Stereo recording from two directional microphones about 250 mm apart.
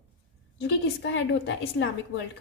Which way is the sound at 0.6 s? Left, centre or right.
Left.